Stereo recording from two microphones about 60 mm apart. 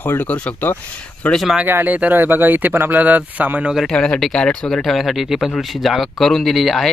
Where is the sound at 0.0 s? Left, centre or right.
Left.